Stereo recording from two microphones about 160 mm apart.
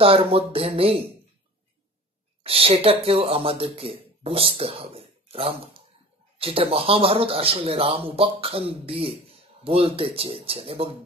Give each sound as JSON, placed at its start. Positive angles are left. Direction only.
{"t": 0.0, "sound": "speech", "side_deg": -35}
{"t": 2.4, "sound": "speech", "side_deg": -35}